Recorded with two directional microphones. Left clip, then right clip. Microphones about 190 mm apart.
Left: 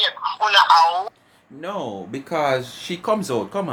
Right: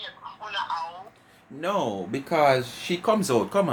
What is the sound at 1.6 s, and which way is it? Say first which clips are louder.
Speech: right 2 dB; 5° right (ahead or behind).